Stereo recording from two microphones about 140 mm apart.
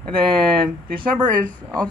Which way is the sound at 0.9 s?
35° right (ahead or behind).